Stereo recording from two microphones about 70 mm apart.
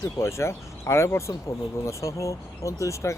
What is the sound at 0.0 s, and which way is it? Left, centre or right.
Speech, left.